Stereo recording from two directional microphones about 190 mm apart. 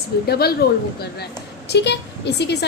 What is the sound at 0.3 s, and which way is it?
Speech, 55° left (ahead or behind).